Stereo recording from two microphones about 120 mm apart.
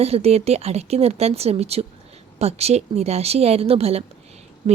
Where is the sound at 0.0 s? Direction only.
60° right (ahead or behind).